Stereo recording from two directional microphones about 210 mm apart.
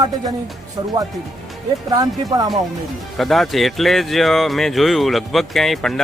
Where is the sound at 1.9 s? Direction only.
20° right (ahead or behind).